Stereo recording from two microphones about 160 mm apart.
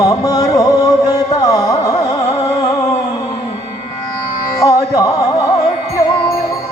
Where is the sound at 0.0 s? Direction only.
20° left (ahead or behind).